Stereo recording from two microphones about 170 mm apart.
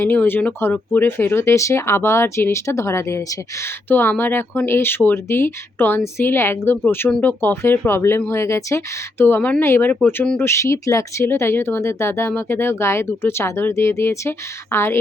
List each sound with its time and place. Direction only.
0.0 s speech: 10° left (ahead or behind)